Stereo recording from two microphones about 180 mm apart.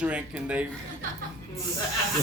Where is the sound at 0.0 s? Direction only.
5° right (ahead or behind).